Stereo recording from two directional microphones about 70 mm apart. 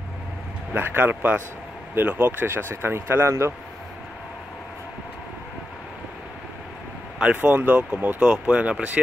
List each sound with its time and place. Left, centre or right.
0.7 s speech: right
7.4 s speech: right